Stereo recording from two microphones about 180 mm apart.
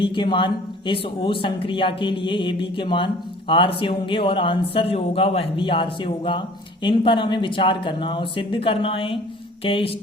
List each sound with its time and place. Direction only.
0.0 s speech: 25° left (ahead or behind)